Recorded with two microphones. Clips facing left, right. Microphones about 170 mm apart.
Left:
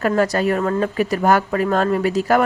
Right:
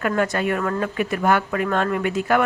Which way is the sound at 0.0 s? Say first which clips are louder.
Left 4 dB; 35° left (ahead or behind).